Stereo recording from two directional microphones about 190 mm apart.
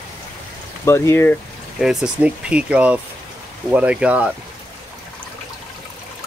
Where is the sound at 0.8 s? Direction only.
15° left (ahead or behind).